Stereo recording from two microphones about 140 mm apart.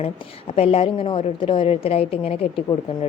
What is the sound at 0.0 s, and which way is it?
A woman's voice, 45° left (ahead or behind).